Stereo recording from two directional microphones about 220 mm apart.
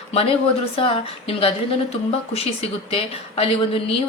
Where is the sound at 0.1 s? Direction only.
25° left (ahead or behind).